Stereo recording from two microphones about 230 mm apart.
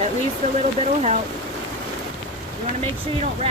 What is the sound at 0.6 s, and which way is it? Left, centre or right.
Speech, right.